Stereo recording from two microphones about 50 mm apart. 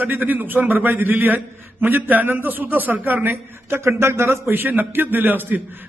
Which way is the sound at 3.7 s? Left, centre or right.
Right.